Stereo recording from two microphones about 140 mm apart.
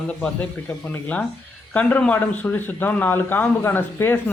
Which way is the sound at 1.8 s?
10° left (ahead or behind).